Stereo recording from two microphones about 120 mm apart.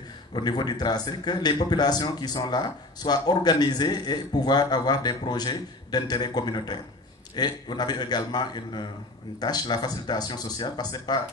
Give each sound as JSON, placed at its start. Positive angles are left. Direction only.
{"t": 0.3, "sound": "speech", "side_deg": 35}